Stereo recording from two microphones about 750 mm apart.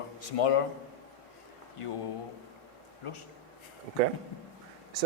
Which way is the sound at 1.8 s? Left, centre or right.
Left.